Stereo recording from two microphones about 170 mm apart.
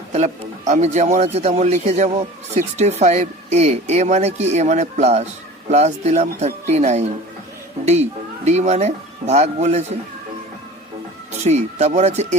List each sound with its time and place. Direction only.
0.1 s speech: 40° right (ahead or behind)
8.4 s speech: 40° right (ahead or behind)
11.4 s speech: 40° right (ahead or behind)